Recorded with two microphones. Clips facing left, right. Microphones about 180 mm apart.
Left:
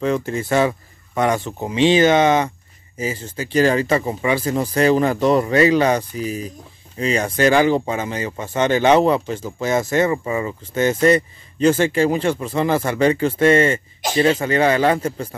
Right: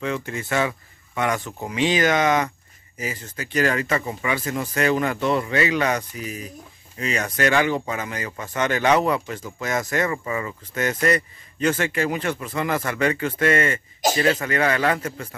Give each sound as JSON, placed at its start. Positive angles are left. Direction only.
{"t": 0.0, "sound": "speech", "side_deg": 35}